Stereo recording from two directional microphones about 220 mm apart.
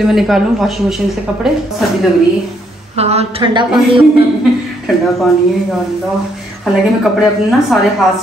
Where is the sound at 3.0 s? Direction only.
30° right (ahead or behind).